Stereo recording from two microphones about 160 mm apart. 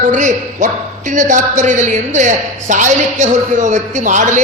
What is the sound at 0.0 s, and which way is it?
A man's voice, 50° right (ahead or behind).